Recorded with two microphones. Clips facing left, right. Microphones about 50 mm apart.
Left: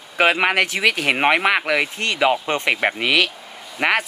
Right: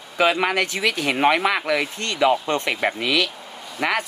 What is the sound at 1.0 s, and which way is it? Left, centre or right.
Speech, left.